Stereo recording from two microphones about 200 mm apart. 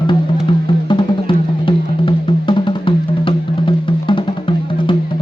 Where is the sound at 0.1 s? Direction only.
25° left (ahead or behind).